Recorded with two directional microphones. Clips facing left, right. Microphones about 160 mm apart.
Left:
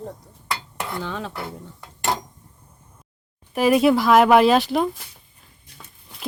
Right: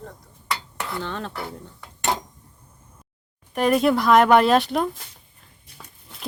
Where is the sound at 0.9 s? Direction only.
5° left (ahead or behind).